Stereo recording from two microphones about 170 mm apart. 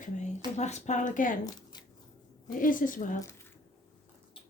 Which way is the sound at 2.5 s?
50° left (ahead or behind).